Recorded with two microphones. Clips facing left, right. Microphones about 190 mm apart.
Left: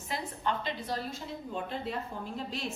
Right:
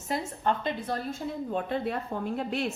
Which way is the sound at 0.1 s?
45° right (ahead or behind).